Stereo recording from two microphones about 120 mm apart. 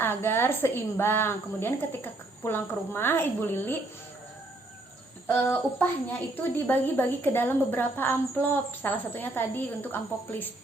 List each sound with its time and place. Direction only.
0.0 s a woman's voice: 20° left (ahead or behind)
5.3 s a woman's voice: 20° left (ahead or behind)